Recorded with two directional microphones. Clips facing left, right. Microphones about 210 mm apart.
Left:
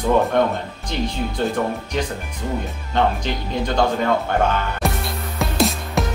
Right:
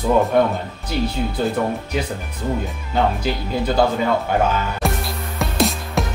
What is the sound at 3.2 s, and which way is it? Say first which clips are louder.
Speech: right 2 dB; 5° right (ahead or behind).